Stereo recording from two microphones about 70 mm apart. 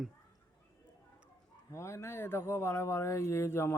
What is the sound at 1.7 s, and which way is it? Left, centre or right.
Speech, left.